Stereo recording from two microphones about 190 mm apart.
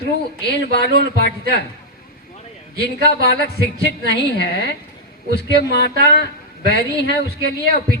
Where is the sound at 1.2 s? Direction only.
60° left (ahead or behind).